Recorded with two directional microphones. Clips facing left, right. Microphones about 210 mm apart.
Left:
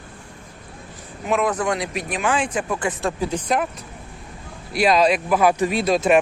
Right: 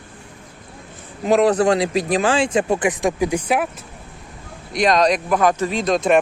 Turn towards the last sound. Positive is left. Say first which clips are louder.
# even
turn(degrees=5)  # may be behind; listen again after turning